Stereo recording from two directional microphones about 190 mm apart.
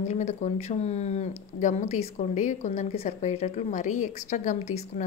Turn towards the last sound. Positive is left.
turn(degrees=35)  # may be behind; listen again after turning